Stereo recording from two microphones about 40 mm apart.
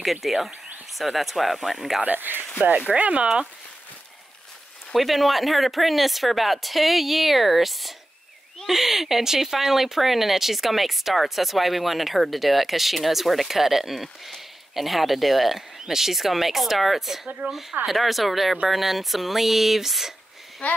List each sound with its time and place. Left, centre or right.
0.0 s speech: centre
2.0 s speech: right
2.9 s speech: right
4.9 s speech: centre
20.6 s speech: left